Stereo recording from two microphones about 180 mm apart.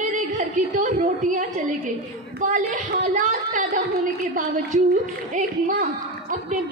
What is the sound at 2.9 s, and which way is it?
A woman's voice, 50° right (ahead or behind).